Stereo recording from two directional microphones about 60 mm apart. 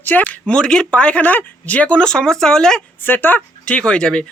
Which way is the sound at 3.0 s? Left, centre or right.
Left.